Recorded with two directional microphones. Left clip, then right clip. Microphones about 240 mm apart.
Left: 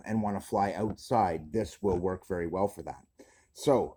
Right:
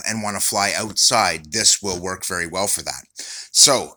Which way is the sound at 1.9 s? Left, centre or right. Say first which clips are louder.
Right 5 dB; right.